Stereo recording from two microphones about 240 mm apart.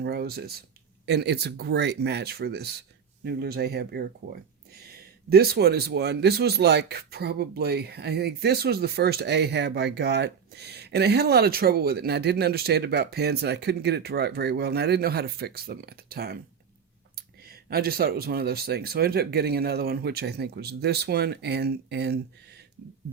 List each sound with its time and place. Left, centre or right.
0.0 s speech: right